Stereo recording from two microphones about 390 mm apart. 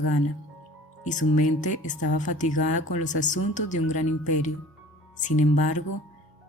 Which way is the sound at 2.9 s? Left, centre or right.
Centre.